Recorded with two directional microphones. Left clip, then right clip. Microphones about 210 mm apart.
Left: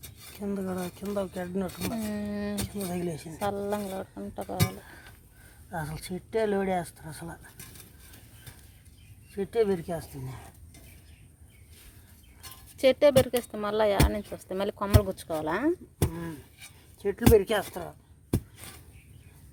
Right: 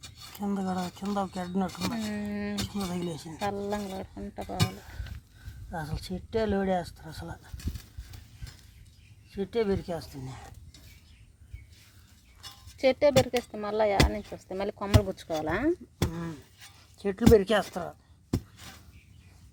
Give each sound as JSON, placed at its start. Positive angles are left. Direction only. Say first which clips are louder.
{"t": 0.3, "sound": "speech", "louder": "right 1 dB", "side_deg": -30}
{"t": 1.7, "sound": "speech", "louder": "even", "side_deg": 5}
{"t": 2.6, "sound": "speech", "louder": "left 1 dB", "side_deg": -30}
{"t": 3.5, "sound": "speech", "louder": "left 2 dB", "side_deg": 10}
{"t": 5.7, "sound": "speech", "louder": "left 1 dB", "side_deg": -15}
{"t": 9.3, "sound": "speech", "louder": "left 2 dB", "side_deg": -15}
{"t": 12.7, "sound": "speech", "louder": "left 2 dB", "side_deg": 15}
{"t": 16.0, "sound": "beatboxing", "louder": "left 1 dB", "side_deg": -25}
{"t": 17.0, "sound": "speech", "louder": "even", "side_deg": -30}